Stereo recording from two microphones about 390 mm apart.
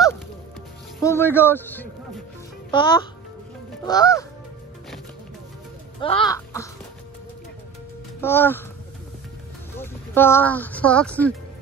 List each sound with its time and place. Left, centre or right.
0.9 s music: centre
5.9 s speech: centre
8.2 s speech: centre
9.8 s speech: centre